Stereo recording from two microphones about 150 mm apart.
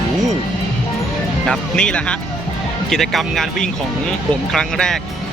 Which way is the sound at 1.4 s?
5° left (ahead or behind).